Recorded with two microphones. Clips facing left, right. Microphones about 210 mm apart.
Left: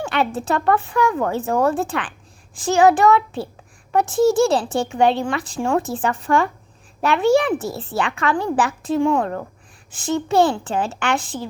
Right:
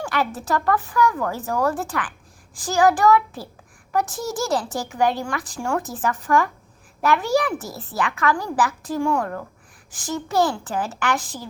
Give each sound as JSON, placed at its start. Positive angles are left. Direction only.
{"t": 0.0, "sound": "speech", "side_deg": 25}